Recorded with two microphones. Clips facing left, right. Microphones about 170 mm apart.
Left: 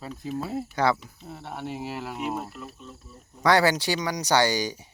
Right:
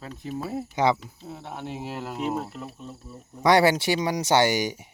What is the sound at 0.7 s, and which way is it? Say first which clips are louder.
Speech: right 2 dB; 20° right (ahead or behind).